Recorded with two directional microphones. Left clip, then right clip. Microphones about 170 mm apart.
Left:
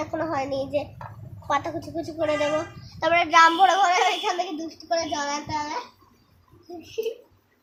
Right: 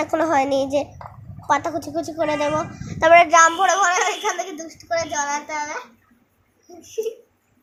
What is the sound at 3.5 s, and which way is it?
Speech, 30° right (ahead or behind).